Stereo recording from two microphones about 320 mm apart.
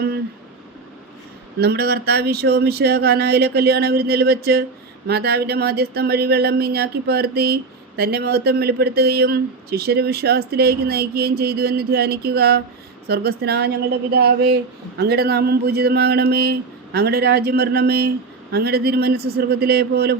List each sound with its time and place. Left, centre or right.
1.5 s speech: right